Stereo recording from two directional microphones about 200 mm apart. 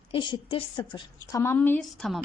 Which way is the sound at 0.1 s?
25° left (ahead or behind).